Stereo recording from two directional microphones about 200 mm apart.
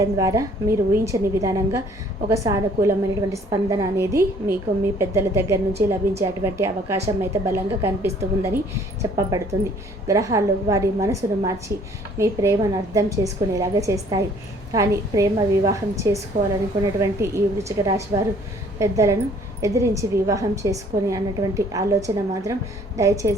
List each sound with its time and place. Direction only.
0.0 s a woman's voice: 15° right (ahead or behind)